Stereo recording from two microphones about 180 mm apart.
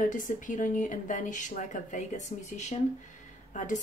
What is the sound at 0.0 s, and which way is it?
A woman's voice, 45° left (ahead or behind).